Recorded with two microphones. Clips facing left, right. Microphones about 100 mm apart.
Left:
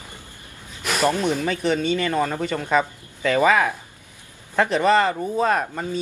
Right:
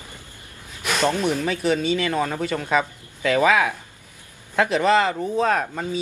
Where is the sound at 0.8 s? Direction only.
5° left (ahead or behind).